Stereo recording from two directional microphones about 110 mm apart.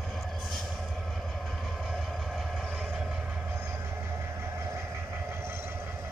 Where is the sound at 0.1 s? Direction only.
Centre (ahead or behind).